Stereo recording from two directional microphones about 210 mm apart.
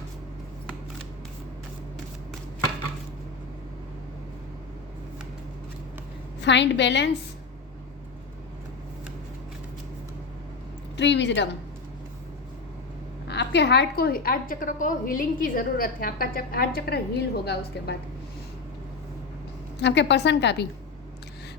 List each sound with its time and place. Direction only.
6.4 s a woman's voice: 55° left (ahead or behind)
10.9 s a woman's voice: 55° left (ahead or behind)
13.2 s a woman's voice: 55° left (ahead or behind)
19.8 s a woman's voice: 55° left (ahead or behind)